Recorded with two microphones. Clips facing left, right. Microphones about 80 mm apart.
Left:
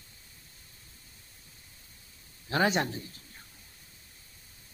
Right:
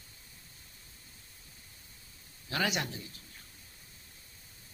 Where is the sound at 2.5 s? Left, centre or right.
Left.